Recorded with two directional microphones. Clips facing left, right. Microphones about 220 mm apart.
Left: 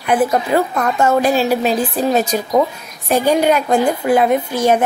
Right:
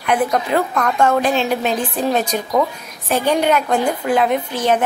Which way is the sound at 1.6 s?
35° left (ahead or behind).